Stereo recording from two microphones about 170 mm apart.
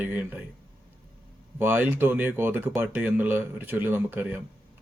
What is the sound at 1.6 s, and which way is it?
Speech, 10° right (ahead or behind).